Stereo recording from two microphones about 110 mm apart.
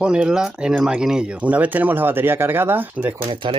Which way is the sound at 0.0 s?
10° right (ahead or behind).